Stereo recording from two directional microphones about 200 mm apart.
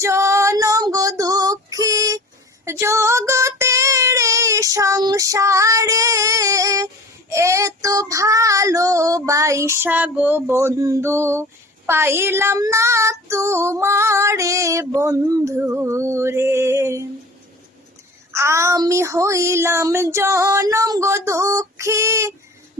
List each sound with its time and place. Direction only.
0.0 s female singing: 15° right (ahead or behind)
2.6 s child singing: 15° right (ahead or behind)
11.9 s female singing: 10° right (ahead or behind)
18.3 s female singing: 15° right (ahead or behind)